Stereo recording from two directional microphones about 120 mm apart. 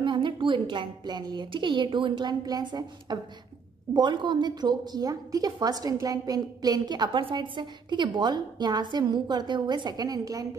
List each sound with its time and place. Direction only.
0.0 s a woman's voice: 45° right (ahead or behind)